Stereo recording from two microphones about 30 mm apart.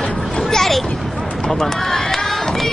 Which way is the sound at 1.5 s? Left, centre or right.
Centre.